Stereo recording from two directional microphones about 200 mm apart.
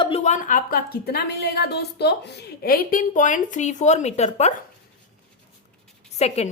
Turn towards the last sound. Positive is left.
turn(degrees=35)  # may be behind; listen again after turning